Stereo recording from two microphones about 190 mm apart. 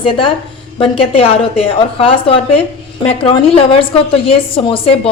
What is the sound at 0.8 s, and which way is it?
A woman's voice, 30° left (ahead or behind).